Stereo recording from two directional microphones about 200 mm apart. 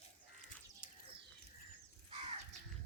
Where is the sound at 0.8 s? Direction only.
45° left (ahead or behind).